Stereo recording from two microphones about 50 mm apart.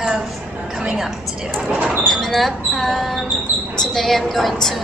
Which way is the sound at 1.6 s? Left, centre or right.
Right.